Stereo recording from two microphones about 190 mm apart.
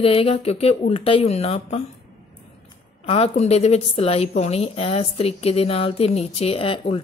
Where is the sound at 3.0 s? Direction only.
30° left (ahead or behind).